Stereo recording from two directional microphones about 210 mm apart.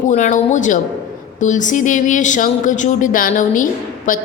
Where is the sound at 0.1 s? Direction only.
35° left (ahead or behind).